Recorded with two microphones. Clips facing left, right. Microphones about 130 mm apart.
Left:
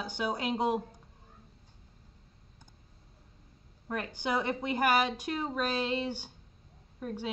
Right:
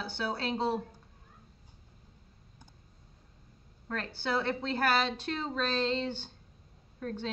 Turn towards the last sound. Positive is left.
turn(degrees=10)  # may be behind; listen again after turning